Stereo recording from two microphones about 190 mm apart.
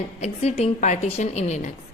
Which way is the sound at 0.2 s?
35° left (ahead or behind).